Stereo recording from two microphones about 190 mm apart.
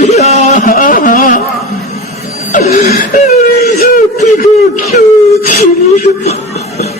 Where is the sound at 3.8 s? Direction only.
45° left (ahead or behind).